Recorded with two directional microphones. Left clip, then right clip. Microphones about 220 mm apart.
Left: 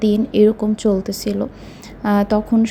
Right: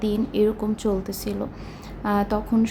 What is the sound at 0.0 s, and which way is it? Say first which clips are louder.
A woman's voice: left 8 dB; 20° left (ahead or behind).